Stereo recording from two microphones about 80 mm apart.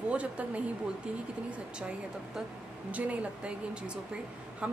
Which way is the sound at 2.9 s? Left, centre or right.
Centre.